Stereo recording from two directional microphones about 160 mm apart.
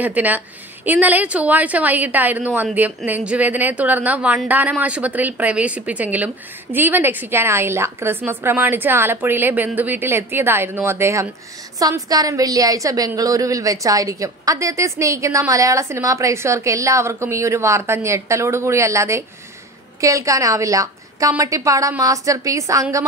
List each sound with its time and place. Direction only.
0.0 s a woman's voice: 10° right (ahead or behind)